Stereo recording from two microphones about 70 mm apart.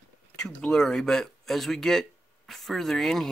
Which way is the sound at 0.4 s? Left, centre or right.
Centre.